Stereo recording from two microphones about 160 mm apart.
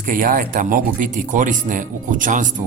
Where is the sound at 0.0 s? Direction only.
60° right (ahead or behind).